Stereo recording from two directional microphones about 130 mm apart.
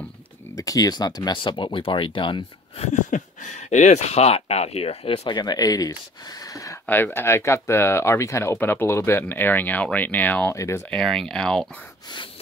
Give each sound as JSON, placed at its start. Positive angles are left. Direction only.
{"t": 0.6, "sound": "speech", "side_deg": 30}
{"t": 2.8, "sound": "speech", "side_deg": 70}
{"t": 5.2, "sound": "speech", "side_deg": 30}
{"t": 6.9, "sound": "speech", "side_deg": 15}
{"t": 10.5, "sound": "speech", "side_deg": 25}
{"t": 10.9, "sound": "speech", "side_deg": 5}